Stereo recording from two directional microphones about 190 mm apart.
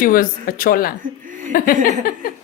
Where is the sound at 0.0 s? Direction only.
50° left (ahead or behind).